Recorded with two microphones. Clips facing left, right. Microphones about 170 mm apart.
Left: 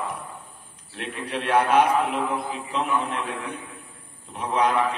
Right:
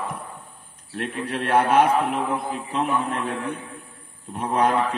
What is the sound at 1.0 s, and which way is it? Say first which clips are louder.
A man's voice: right 3 dB; 50° right (ahead or behind).